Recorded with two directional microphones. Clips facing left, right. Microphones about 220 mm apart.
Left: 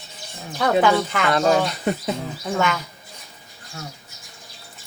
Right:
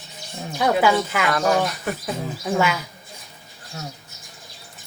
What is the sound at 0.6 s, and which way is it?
Speech, 5° right (ahead or behind).